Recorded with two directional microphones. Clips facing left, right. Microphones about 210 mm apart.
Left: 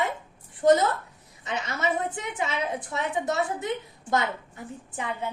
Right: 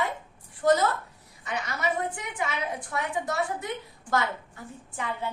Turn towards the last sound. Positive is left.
turn(degrees=20)  # may be behind; listen again after turning